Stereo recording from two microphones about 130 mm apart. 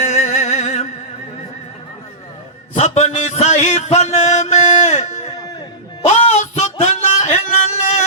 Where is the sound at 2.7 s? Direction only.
60° left (ahead or behind).